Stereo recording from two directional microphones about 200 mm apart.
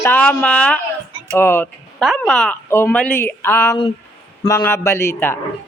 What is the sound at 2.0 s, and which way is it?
A man's voice, centre (ahead or behind).